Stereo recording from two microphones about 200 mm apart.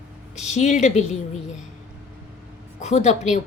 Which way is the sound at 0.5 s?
35° left (ahead or behind).